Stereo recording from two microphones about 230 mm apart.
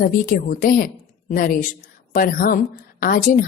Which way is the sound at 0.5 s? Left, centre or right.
Left.